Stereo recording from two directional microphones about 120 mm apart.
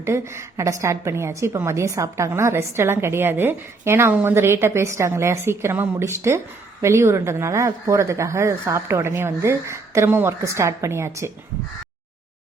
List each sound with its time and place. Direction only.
0.0 s a woman's voice: 25° right (ahead or behind)